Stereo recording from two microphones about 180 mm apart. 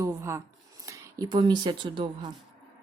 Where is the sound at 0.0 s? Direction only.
15° right (ahead or behind).